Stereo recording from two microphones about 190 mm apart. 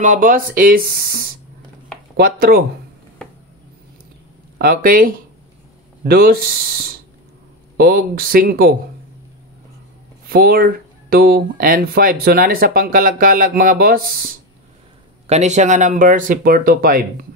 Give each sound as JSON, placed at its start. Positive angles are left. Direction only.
{"t": 0.0, "sound": "speech", "side_deg": -45}
{"t": 4.6, "sound": "speech", "side_deg": -50}
{"t": 10.2, "sound": "speech", "side_deg": -50}
{"t": 15.2, "sound": "speech", "side_deg": -35}